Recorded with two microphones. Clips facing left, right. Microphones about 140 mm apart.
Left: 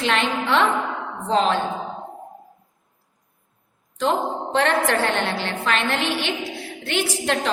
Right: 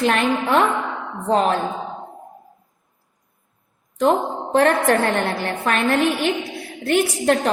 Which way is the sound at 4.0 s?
45° right (ahead or behind).